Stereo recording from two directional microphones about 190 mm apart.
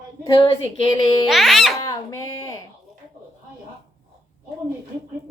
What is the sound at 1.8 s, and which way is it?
Speech, 20° left (ahead or behind).